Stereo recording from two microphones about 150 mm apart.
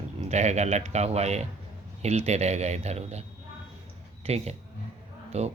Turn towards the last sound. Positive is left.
turn(degrees=-45)  # may be behind; listen again after turning